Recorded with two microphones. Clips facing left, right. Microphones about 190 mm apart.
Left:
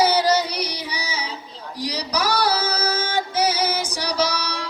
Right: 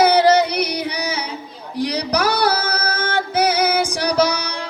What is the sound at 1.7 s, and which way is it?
Music, 60° right (ahead or behind).